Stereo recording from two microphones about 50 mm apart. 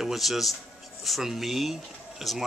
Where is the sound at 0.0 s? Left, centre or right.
Centre.